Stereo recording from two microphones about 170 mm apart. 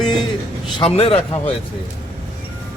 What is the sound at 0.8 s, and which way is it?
Speech, 35° left (ahead or behind).